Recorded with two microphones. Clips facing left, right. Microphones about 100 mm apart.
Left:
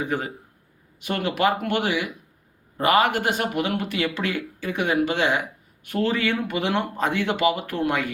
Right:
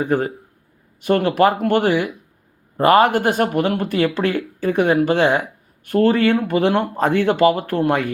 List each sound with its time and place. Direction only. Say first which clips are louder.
0.0 s speech: right 7 dB; 50° right (ahead or behind)